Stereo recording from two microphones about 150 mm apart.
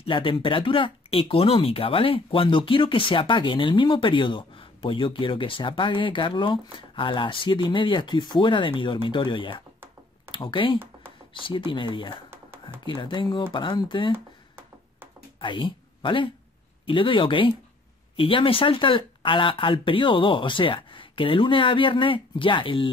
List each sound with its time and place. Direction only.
0.0 s speech: 35° left (ahead or behind)
15.4 s speech: 35° left (ahead or behind)